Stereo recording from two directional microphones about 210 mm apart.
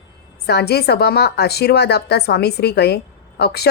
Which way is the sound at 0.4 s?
50° left (ahead or behind).